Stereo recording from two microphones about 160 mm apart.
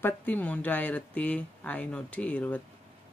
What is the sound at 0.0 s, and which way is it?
Speech, 10° left (ahead or behind).